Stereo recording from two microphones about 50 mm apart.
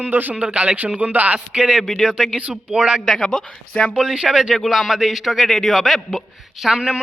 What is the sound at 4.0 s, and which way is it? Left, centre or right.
A man's voice, centre.